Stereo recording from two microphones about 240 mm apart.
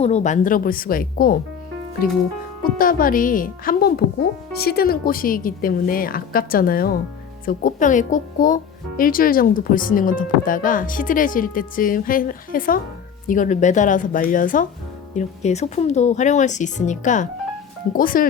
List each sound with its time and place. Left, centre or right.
0.0 s speech: left
2.7 s speech: left